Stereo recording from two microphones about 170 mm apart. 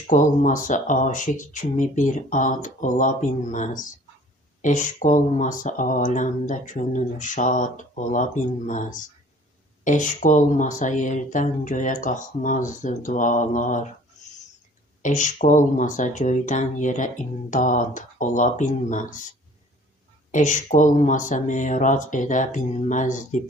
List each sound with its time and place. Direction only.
0.1 s speech: 50° left (ahead or behind)
15.0 s speech: 45° left (ahead or behind)
20.3 s speech: 45° left (ahead or behind)